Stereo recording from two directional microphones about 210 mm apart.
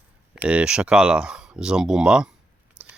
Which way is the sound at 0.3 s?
5° right (ahead or behind).